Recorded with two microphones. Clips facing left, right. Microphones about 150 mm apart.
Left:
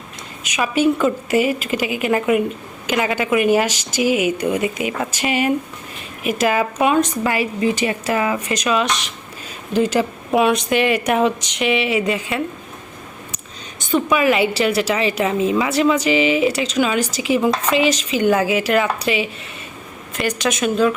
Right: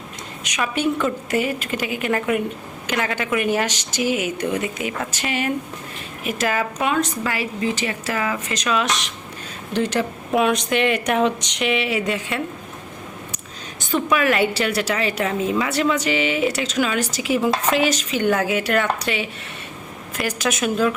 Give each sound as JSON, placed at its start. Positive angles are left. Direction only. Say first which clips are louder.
{"t": 0.4, "sound": "speech", "louder": "left 5 dB", "side_deg": 5}
{"t": 8.8, "sound": "a woman's voice", "louder": "left 2 dB", "side_deg": 0}
{"t": 13.7, "sound": "a woman's voice", "louder": "left 3 dB", "side_deg": 0}
{"t": 20.1, "sound": "a woman's voice", "louder": "left 3 dB", "side_deg": -5}